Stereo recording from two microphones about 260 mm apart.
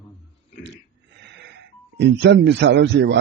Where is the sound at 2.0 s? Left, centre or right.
Right.